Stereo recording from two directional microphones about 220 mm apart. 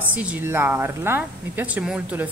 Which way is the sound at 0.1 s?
5° right (ahead or behind).